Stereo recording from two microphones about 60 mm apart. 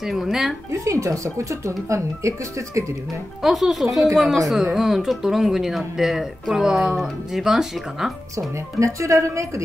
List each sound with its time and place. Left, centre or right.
0.0 s speech: centre
0.8 s speech: right
3.4 s speech: centre
8.7 s speech: right